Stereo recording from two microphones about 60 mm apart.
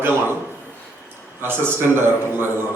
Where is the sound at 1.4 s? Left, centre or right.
Right.